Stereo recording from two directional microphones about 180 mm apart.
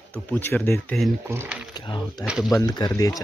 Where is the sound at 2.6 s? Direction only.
20° left (ahead or behind).